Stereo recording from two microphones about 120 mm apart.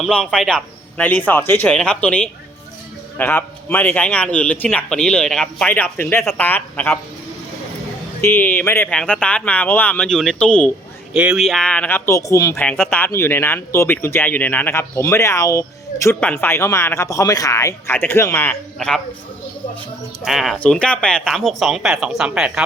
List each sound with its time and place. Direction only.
0.0 s a man's voice: 5° left (ahead or behind)
8.2 s a man's voice: 15° left (ahead or behind)
8.9 s a man's voice: 10° left (ahead or behind)
11.1 s a man's voice: 10° right (ahead or behind)
11.3 s a man's voice: 5° left (ahead or behind); by 12.5 s 30° left (ahead or behind)
12.7 s speech: centre (ahead or behind)
13.0 s speech: 20° left (ahead or behind)
18.8 s a man's voice: 5° left (ahead or behind)
20.2 s a man's voice: centre (ahead or behind)